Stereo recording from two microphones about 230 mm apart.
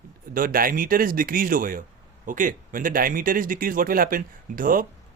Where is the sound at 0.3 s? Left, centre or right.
Right.